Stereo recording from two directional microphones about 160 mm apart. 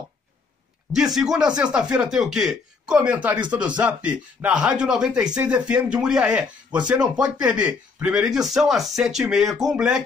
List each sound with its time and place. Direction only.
0.9 s speech: 5° right (ahead or behind)